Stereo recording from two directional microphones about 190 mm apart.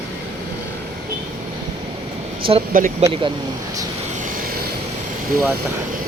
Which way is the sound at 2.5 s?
25° right (ahead or behind).